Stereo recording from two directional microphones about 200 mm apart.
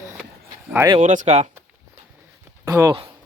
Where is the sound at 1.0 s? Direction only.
40° right (ahead or behind).